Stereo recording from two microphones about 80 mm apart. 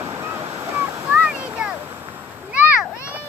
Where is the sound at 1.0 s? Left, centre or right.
Centre.